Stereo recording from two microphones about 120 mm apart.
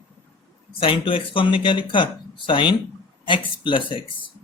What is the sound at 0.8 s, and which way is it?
Speech, 50° left (ahead or behind).